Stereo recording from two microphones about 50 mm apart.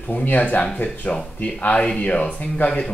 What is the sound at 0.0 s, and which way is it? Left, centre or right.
Speech, left.